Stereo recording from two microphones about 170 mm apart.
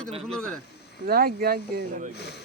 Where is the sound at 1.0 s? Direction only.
60° right (ahead or behind).